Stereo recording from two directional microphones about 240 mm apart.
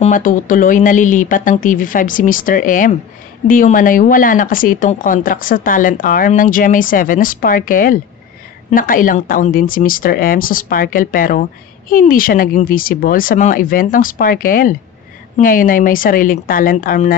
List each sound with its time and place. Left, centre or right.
0.0 s speech: left